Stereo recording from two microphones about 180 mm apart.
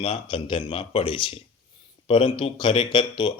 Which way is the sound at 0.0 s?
30° left (ahead or behind).